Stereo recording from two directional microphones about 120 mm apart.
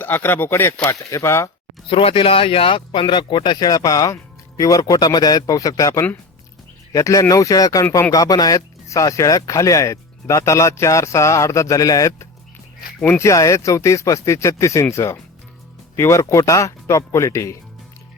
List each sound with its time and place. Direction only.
0.0 s speech: 15° left (ahead or behind)
1.9 s speech: 50° left (ahead or behind); by 17.6 s 25° left (ahead or behind)